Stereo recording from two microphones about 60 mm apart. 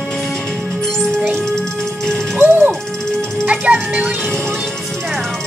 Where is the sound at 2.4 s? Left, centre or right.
Right.